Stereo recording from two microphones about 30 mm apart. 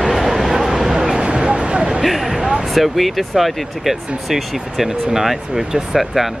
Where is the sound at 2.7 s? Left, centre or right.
Centre.